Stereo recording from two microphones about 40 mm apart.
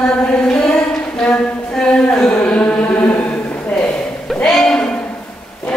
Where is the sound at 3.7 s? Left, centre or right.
Centre.